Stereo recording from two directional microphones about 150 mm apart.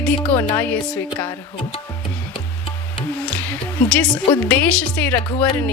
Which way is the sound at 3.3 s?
10° left (ahead or behind).